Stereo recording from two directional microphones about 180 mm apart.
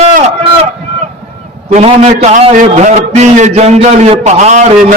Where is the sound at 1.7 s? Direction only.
35° right (ahead or behind).